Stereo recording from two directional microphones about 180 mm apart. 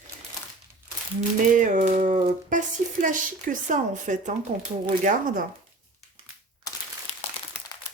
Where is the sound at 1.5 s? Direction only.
45° right (ahead or behind).